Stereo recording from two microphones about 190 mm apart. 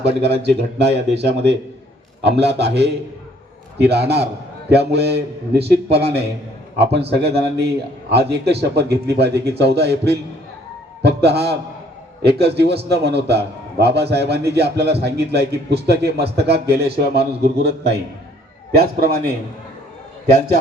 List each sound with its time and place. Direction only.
0.1 s a man's voice: 65° right (ahead or behind)